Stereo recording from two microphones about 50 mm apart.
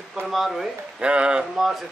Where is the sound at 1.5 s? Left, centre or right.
Centre.